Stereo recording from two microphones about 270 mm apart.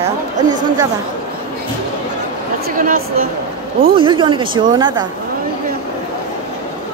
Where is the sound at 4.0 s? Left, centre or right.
Centre.